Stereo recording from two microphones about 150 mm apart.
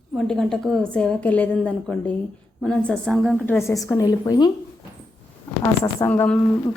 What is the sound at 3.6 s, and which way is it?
Speech, 20° left (ahead or behind).